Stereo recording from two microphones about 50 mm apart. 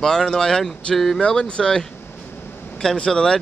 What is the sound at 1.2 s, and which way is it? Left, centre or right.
Speech, centre.